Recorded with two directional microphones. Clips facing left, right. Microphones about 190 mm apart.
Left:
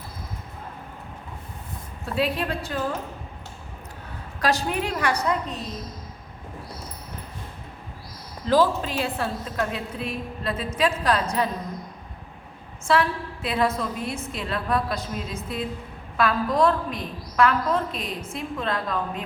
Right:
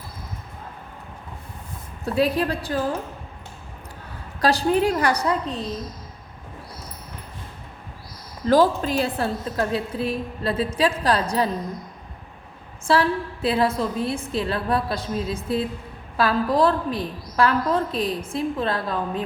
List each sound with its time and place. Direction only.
2.1 s a woman's voice: 40° right (ahead or behind)
4.4 s a woman's voice: 35° right (ahead or behind)
8.4 s a woman's voice: 45° right (ahead or behind)
12.9 s a woman's voice: 35° right (ahead or behind)